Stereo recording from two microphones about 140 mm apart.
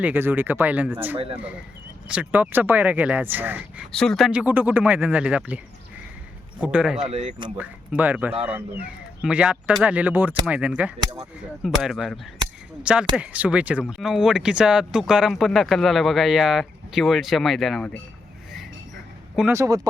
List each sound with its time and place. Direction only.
0.0 s speech: 15° right (ahead or behind)
1.1 s speech: 40° right (ahead or behind)
1.4 s speech: 10° right (ahead or behind)
3.9 s speech: 5° left (ahead or behind)
6.6 s speech: 10° right (ahead or behind)
7.1 s speech: 55° right (ahead or behind)
7.5 s speech: 10° right (ahead or behind); by 18.0 s 5° left (ahead or behind)
19.5 s speech: 25° right (ahead or behind)